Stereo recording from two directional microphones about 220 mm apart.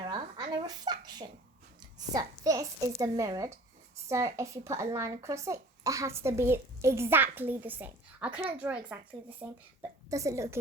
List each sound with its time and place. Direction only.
0.1 s speech: 20° right (ahead or behind)